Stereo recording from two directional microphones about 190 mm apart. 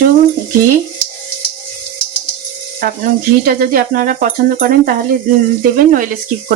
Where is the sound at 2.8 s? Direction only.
50° right (ahead or behind).